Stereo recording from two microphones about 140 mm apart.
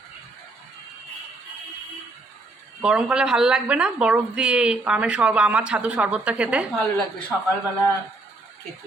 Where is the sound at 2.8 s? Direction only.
5° right (ahead or behind).